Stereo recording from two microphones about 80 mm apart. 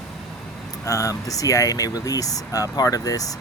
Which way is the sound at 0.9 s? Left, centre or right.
Left.